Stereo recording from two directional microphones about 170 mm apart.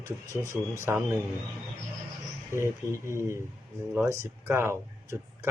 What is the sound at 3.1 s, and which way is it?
Speech, 15° right (ahead or behind).